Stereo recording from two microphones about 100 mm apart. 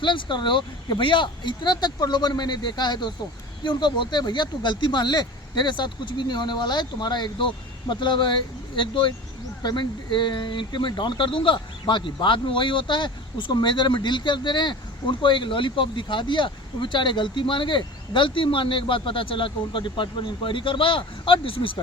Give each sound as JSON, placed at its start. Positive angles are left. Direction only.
{"t": 0.0, "sound": "speech", "side_deg": 55}